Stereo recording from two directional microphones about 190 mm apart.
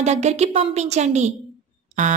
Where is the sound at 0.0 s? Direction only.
35° right (ahead or behind).